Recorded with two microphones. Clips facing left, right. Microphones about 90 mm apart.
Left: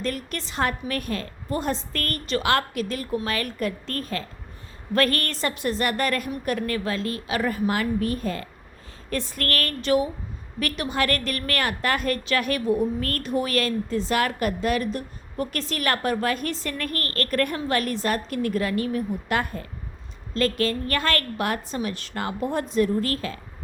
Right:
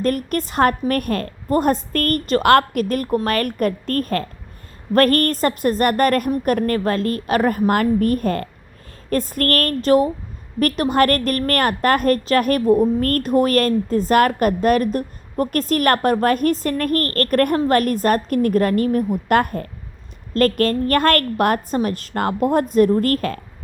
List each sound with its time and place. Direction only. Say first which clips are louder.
0.0 s a woman's voice: right 9 dB; 50° right (ahead or behind)